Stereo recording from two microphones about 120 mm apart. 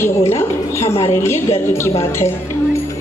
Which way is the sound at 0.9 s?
55° left (ahead or behind).